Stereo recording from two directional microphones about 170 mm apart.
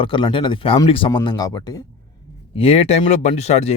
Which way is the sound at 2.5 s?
35° left (ahead or behind).